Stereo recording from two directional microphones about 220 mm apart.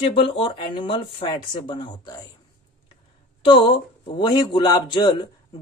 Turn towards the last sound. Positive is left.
turn(degrees=20)  # may be behind; listen again after turning